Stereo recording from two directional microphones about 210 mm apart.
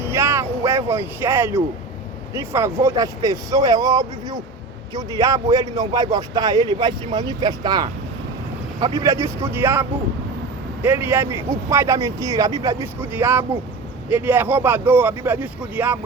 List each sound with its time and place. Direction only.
0.0 s a sound: 10° right (ahead or behind)
2.3 s speech: 10° right (ahead or behind)
10.8 s speech: 10° right (ahead or behind)